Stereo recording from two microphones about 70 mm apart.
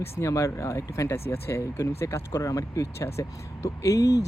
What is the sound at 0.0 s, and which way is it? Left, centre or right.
Speech, left.